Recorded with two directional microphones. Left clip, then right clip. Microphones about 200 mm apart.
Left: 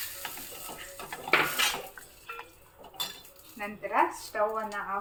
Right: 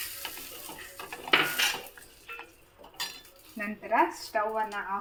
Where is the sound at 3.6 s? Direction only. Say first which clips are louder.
Right 2 dB; 40° right (ahead or behind).